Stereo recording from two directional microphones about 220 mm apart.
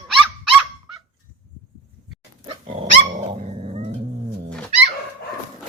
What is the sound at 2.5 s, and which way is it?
Dog, 30° right (ahead or behind).